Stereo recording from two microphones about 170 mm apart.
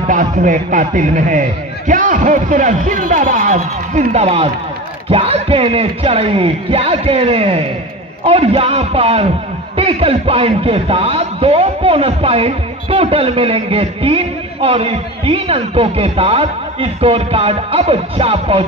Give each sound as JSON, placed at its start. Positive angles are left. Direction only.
{"t": 0.1, "sound": "a man's voice", "side_deg": -50}